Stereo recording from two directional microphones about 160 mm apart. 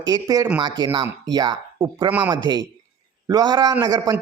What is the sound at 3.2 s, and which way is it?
Speech, 25° right (ahead or behind).